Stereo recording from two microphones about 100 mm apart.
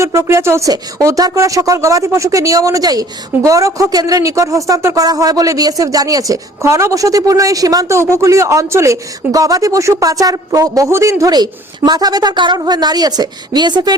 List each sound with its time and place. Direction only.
0.0 s a woman's voice: 30° right (ahead or behind); by 13.9 s 45° right (ahead or behind)